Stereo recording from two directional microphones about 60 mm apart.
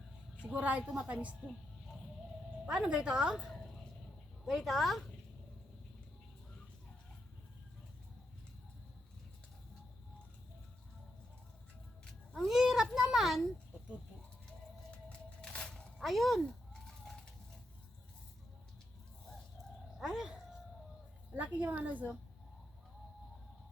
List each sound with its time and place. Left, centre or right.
0.5 s a woman's voice: right
1.4 s a sound: centre
2.6 s a woman's voice: centre
4.4 s a woman's voice: centre
12.5 s a child's voice: centre
15.7 s a sound: centre
20.0 s speech: centre
21.3 s a woman's voice: right